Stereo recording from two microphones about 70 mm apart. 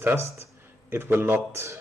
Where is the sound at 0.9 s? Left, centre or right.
Right.